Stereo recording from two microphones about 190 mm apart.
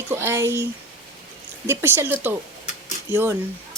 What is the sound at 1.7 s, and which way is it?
Speech, 10° right (ahead or behind).